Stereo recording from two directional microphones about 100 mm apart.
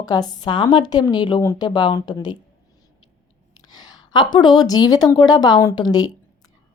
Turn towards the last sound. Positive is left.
turn(degrees=45)  # may be behind; listen again after turning